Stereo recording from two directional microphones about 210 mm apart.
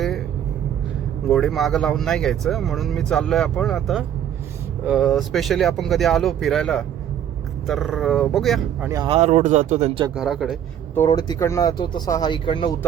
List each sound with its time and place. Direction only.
1.3 s speech: centre (ahead or behind)
8.9 s speech: 15° right (ahead or behind)
9.1 s speech: 30° right (ahead or behind)
10.2 s speech: centre (ahead or behind)
10.9 s speech: 15° left (ahead or behind)